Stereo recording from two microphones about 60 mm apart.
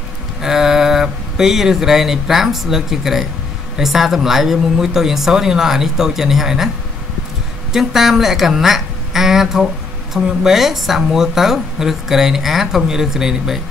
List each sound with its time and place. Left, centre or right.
0.4 s speech: centre
7.7 s a woman's voice: centre